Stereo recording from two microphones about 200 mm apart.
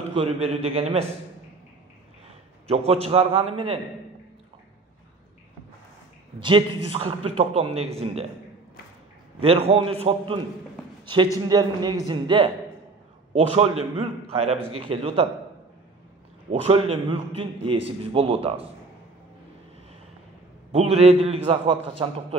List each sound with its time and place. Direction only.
0.1 s a man's voice: 25° right (ahead or behind)
2.2 s a man's voice: 30° right (ahead or behind)
6.4 s a man's voice: 25° right (ahead or behind)
9.4 s a man's voice: 30° right (ahead or behind)
11.4 s a man's voice: 20° right (ahead or behind)
16.4 s a man's voice: 30° right (ahead or behind)
20.7 s a man's voice: 30° right (ahead or behind)